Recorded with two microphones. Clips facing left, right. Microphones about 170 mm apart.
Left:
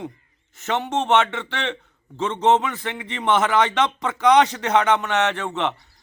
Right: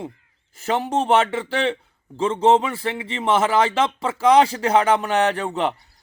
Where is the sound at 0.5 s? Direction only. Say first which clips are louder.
Right 2 dB; 35° right (ahead or behind).